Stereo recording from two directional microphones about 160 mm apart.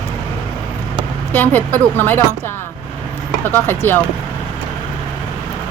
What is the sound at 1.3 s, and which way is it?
Speech, 10° left (ahead or behind).